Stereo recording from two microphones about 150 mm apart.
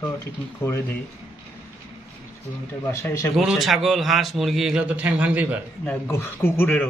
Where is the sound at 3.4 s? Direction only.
Centre (ahead or behind).